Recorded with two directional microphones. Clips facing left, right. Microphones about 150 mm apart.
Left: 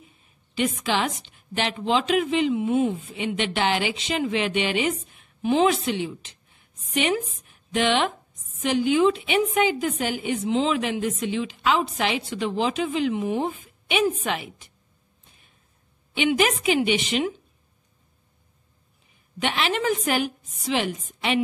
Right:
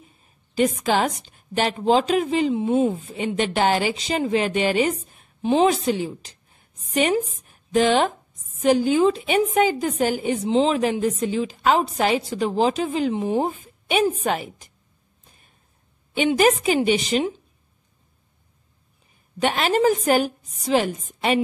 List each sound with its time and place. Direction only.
0.2 s a woman's voice: 40° right (ahead or behind)
15.2 s a sound: 40° right (ahead or behind)
16.2 s a woman's voice: 40° right (ahead or behind)
19.4 s a woman's voice: 40° right (ahead or behind)